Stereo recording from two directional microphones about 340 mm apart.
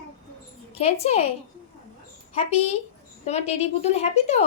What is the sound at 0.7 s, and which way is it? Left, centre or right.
Speech, centre.